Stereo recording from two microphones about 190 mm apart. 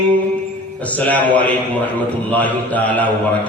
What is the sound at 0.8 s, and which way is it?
A man's voice, 10° left (ahead or behind).